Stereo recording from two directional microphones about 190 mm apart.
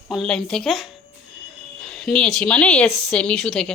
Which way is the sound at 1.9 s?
5° left (ahead or behind).